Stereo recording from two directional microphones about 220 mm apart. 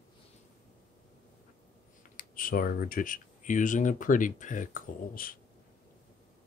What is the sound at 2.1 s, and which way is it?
Speech, 40° left (ahead or behind).